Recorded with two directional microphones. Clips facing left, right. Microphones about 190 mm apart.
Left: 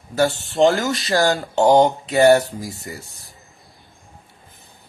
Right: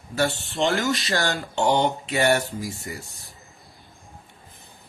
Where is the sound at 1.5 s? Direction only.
40° left (ahead or behind).